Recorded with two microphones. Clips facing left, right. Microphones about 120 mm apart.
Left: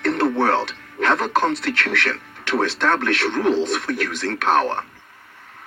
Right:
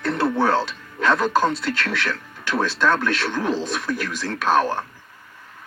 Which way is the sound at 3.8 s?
65° left (ahead or behind).